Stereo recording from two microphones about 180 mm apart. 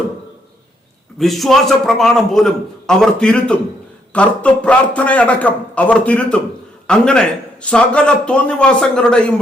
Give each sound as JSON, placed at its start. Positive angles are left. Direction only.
{"t": 1.2, "sound": "a man's voice", "side_deg": 0}